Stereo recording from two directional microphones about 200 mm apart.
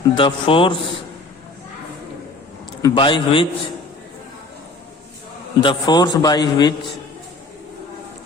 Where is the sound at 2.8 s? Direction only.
25° left (ahead or behind).